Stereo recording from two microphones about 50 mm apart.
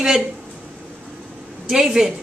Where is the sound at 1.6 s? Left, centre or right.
Centre.